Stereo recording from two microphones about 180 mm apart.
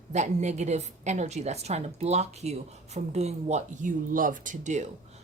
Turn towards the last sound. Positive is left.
turn(degrees=-40)  # may be behind; listen again after turning